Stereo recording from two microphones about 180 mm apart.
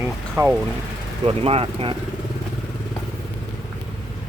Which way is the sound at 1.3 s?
30° right (ahead or behind).